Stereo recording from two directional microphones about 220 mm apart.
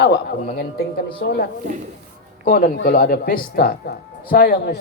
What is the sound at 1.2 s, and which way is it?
Speech, 45° left (ahead or behind).